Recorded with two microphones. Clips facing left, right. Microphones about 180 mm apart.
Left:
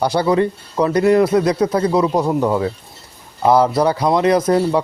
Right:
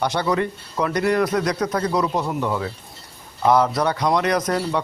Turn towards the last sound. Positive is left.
turn(degrees=30)  # may be behind; listen again after turning